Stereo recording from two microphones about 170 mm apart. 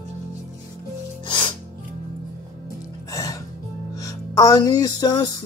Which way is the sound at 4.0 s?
20° left (ahead or behind).